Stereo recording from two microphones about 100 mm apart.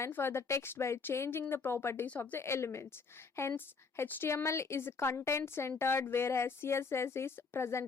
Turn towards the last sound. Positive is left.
turn(degrees=25)  # may be behind; listen again after turning